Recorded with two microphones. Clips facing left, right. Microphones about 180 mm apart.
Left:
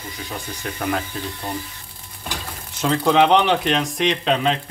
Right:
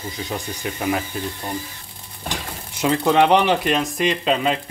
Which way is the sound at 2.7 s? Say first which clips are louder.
Even; 5° right (ahead or behind).